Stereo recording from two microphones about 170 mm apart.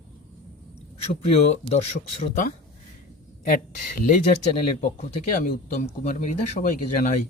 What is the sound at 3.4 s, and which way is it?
Speech, 55° left (ahead or behind).